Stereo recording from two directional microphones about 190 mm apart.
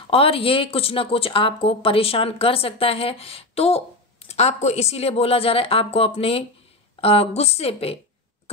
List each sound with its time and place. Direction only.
0.0 s a woman's voice: 30° left (ahead or behind)